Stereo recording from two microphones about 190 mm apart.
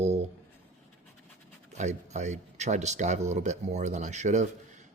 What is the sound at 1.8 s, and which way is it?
Speech, 40° right (ahead or behind).